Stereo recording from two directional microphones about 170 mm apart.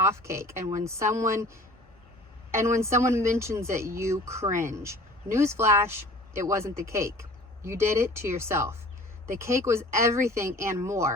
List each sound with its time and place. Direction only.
0.0 s speech: 15° right (ahead or behind)
2.5 s speech: 15° right (ahead or behind)